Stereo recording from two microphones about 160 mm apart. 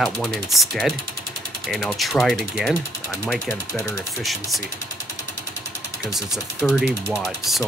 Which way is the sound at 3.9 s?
Centre (ahead or behind).